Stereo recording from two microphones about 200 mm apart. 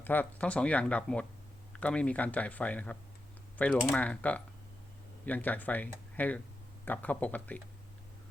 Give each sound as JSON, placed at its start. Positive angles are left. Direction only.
{"t": 0.0, "sound": "speech", "side_deg": 10}